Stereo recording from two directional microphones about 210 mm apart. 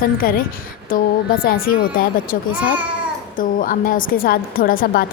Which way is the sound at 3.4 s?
40° left (ahead or behind).